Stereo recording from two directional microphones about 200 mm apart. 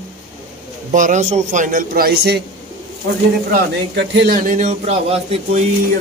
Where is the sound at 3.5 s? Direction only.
55° right (ahead or behind); by 5.6 s 30° right (ahead or behind).